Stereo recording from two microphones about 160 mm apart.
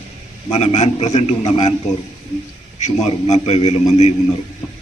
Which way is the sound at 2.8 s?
40° left (ahead or behind).